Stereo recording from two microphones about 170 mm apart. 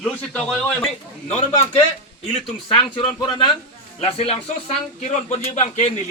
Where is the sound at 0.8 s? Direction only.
40° left (ahead or behind).